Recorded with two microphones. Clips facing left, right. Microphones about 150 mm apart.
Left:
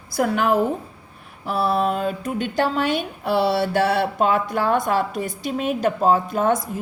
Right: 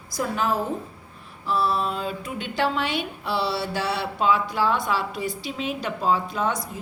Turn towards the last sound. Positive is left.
turn(degrees=50)  # may be behind; listen again after turning